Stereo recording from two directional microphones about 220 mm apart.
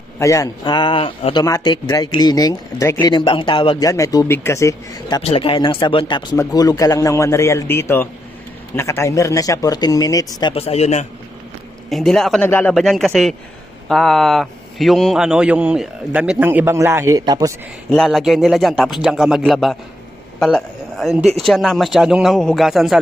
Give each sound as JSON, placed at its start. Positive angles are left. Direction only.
{"t": 0.2, "sound": "speech", "side_deg": 15}
{"t": 10.5, "sound": "speech", "side_deg": 30}
{"t": 11.9, "sound": "a man's voice", "side_deg": 0}
{"t": 17.9, "sound": "a man's voice", "side_deg": 0}